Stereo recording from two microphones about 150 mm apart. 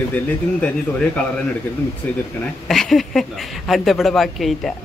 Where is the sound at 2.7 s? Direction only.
Centre (ahead or behind).